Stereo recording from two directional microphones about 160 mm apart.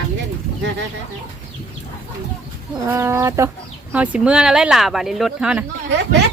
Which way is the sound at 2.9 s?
15° right (ahead or behind).